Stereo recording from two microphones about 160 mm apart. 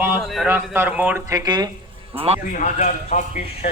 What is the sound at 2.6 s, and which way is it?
A man's voice, 50° left (ahead or behind).